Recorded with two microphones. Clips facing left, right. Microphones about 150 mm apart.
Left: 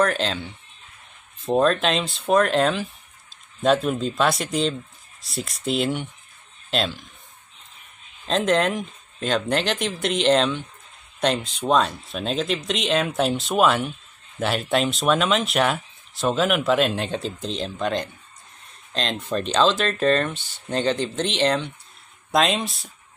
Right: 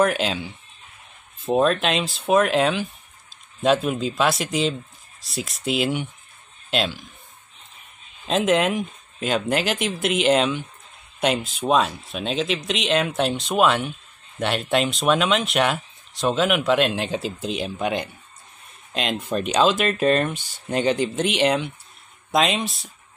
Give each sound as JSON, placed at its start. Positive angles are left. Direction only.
{"t": 0.0, "sound": "speech", "side_deg": -10}
{"t": 8.3, "sound": "speech", "side_deg": -5}